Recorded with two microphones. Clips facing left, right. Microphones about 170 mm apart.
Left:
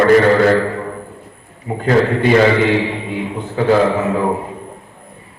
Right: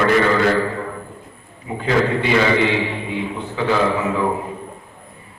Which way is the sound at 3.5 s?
40° left (ahead or behind).